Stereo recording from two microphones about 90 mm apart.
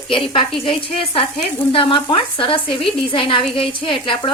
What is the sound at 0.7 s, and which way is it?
Sizzle, 90° left.